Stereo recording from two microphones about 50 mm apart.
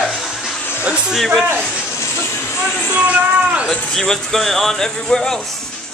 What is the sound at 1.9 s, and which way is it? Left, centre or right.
Music, left.